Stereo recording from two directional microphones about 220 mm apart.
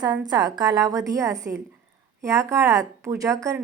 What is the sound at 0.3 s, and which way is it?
A woman's voice, 20° right (ahead or behind).